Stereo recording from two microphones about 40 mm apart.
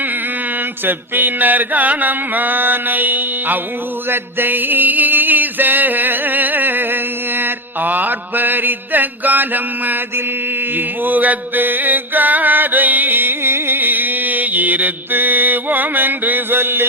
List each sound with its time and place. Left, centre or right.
0.9 s mantra: right
4.1 s music: right
10.8 s chant: right